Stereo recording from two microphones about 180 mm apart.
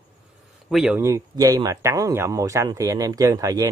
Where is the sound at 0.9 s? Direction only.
15° right (ahead or behind).